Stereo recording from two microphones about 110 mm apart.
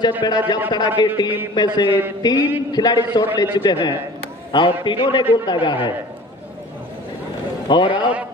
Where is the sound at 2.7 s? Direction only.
40° left (ahead or behind).